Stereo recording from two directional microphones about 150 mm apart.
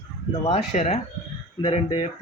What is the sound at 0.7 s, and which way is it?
Speech, 55° left (ahead or behind).